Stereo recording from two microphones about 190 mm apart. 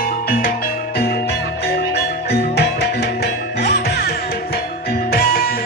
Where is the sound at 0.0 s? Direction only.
50° left (ahead or behind).